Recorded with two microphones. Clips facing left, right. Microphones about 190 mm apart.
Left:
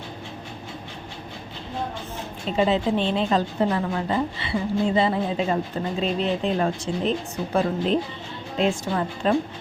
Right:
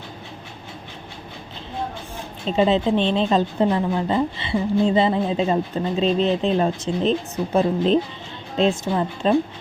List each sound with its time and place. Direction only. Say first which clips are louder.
2.6 s a woman's voice: right 3 dB; 25° right (ahead or behind)